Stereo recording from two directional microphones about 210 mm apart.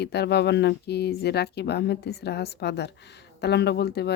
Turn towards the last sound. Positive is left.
turn(degrees=50)  # may be behind; listen again after turning